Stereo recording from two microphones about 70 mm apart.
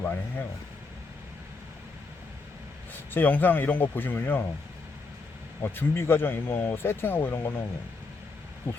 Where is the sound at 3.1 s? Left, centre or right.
Left.